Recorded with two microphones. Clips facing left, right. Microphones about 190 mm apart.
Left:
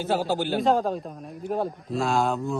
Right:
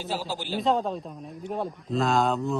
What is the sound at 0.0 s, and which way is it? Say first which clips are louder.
Speech: left 7 dB; 60° left (ahead or behind).